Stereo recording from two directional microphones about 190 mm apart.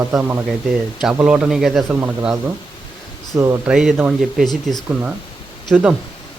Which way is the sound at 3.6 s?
5° right (ahead or behind).